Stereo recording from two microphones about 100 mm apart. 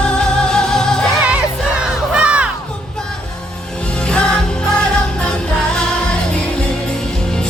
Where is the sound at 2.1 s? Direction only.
10° right (ahead or behind).